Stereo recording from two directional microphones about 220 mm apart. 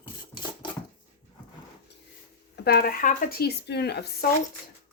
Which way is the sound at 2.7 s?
40° left (ahead or behind).